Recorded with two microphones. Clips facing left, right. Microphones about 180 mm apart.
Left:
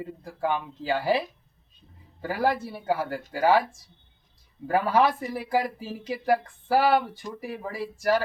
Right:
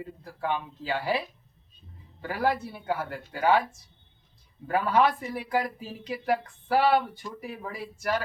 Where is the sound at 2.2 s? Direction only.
35° left (ahead or behind).